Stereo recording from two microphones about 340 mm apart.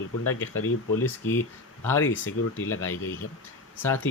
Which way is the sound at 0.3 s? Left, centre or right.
Left.